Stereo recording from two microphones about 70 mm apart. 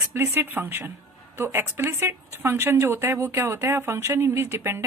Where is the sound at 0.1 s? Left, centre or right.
Right.